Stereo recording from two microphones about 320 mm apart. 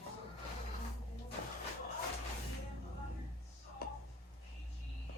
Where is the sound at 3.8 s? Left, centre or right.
Left.